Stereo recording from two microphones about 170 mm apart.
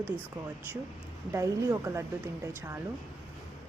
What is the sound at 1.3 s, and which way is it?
Speech, 15° right (ahead or behind).